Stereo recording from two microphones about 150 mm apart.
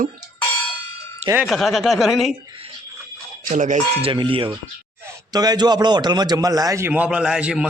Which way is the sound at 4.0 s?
35° right (ahead or behind).